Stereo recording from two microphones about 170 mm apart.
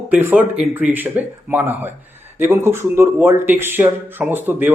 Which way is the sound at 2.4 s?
15° right (ahead or behind).